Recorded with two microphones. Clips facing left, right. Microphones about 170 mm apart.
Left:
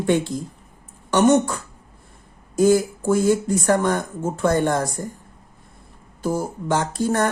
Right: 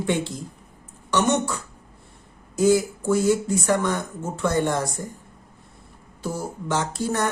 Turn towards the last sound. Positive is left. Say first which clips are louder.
# left 4 dB
turn(degrees=50)  # may be behind; listen again after turning